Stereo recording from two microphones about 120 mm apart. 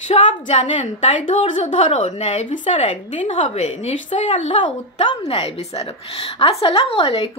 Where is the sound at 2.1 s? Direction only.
85° left.